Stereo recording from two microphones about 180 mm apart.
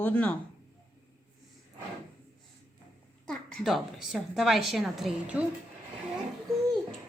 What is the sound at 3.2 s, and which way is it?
A woman's voice, 5° left (ahead or behind).